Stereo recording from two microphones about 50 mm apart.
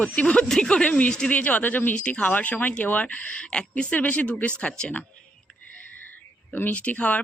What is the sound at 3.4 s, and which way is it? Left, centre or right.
Speech, left.